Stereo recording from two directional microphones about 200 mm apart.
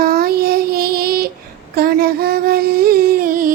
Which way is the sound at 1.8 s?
50° right (ahead or behind).